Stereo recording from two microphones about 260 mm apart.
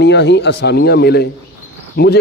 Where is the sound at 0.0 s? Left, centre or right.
Left.